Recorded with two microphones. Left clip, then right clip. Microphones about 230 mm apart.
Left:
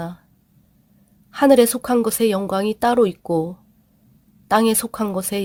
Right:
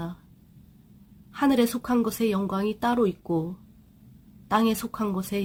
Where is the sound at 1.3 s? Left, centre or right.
Left.